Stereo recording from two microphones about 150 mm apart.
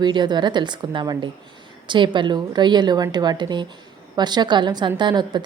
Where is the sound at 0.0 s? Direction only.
30° right (ahead or behind).